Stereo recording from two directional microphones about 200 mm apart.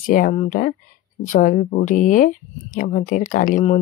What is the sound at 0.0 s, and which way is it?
Speech, 45° left (ahead or behind).